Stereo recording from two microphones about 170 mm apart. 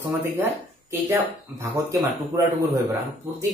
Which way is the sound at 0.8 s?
15° right (ahead or behind).